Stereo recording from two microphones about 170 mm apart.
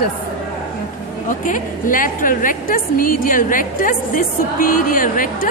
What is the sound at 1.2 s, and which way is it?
A woman's voice, 50° left (ahead or behind).